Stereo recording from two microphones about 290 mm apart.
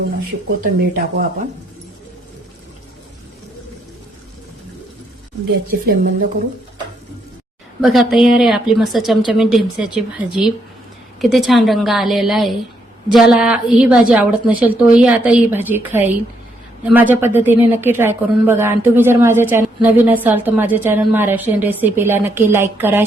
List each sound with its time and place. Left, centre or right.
0.8 s speech: right
5.8 s speech: right
7.8 s a woman's voice: centre